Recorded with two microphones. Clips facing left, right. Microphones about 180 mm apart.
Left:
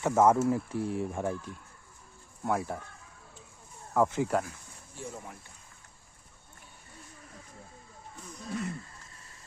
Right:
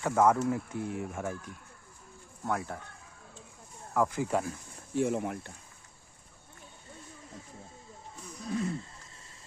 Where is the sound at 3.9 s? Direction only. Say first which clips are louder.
Left 2 dB; 20° left (ahead or behind).